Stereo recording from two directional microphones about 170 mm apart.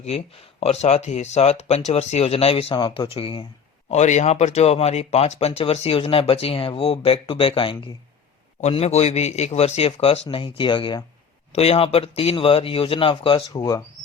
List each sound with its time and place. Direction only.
0.6 s speech: 40° left (ahead or behind); by 13.8 s 20° left (ahead or behind)